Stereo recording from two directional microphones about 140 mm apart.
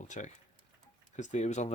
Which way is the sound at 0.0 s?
60° left (ahead or behind).